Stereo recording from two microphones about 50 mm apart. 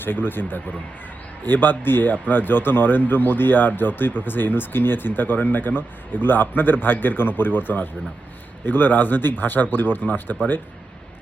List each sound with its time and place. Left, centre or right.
0.0 s speech: left